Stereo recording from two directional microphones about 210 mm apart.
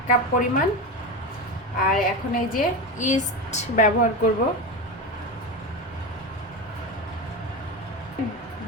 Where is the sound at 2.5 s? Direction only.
35° left (ahead or behind).